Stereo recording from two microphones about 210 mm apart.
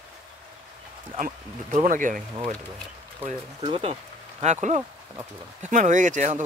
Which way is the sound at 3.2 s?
30° right (ahead or behind).